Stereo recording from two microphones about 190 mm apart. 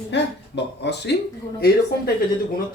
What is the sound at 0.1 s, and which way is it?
Speech, 65° left (ahead or behind).